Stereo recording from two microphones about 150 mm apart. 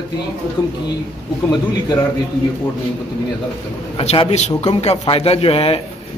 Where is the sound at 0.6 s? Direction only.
25° left (ahead or behind).